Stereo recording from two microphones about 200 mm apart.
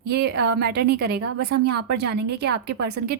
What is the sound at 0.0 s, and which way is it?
A woman's voice, 55° right (ahead or behind).